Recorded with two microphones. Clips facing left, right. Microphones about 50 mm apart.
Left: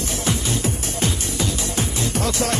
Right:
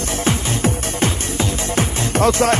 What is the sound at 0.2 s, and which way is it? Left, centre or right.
Music, right.